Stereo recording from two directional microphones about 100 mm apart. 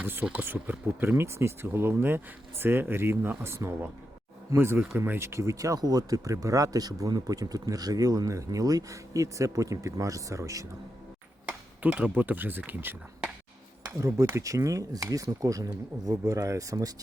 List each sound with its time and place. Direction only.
0.0 s speech: 15° right (ahead or behind); by 10.7 s 35° right (ahead or behind)
11.8 s speech: 15° right (ahead or behind)
14.0 s speech: 30° right (ahead or behind)